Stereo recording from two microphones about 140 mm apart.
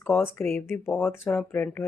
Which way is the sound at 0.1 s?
15° left (ahead or behind).